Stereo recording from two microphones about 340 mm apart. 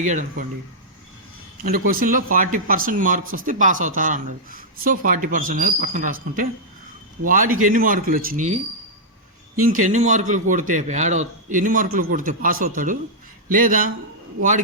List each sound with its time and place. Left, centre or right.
0.0 s speech: right
1.6 s speech: right
9.6 s speech: right